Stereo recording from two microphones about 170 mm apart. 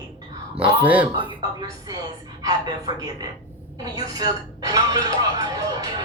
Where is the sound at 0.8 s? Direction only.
10° right (ahead or behind).